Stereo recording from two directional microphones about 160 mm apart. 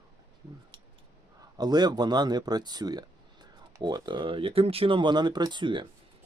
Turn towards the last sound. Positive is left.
turn(degrees=-30)  # may be behind; listen again after turning